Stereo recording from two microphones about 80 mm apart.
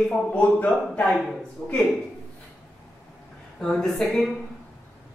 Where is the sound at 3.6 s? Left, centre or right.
Centre.